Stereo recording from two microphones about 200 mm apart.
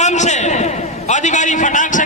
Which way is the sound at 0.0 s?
35° left (ahead or behind).